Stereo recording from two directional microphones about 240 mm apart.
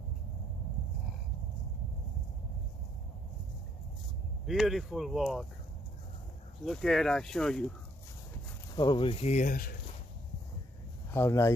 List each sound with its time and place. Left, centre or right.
4.5 s speech: centre
6.6 s speech: centre
8.7 s speech: centre; by 9.8 s left
11.1 s speech: centre